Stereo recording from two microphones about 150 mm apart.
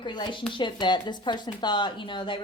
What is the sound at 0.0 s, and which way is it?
Speech, 30° left (ahead or behind).